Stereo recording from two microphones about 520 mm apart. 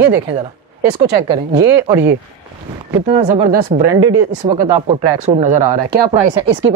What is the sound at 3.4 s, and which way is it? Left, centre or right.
Speech, right.